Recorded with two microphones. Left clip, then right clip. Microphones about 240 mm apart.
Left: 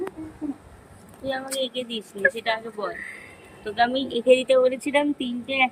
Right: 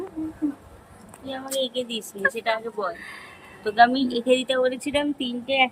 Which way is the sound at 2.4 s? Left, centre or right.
Centre.